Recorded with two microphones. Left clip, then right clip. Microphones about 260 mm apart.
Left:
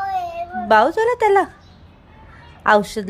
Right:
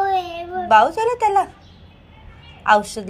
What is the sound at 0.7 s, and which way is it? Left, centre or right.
Speech, left.